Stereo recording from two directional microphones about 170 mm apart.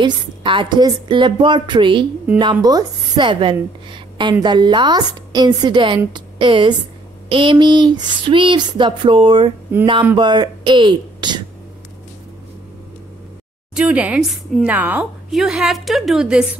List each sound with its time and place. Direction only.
0.0 s a woman's voice: 30° right (ahead or behind)
13.7 s a woman's voice: 5° right (ahead or behind)